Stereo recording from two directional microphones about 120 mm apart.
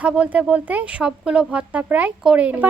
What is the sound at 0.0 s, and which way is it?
Speech, 10° right (ahead or behind).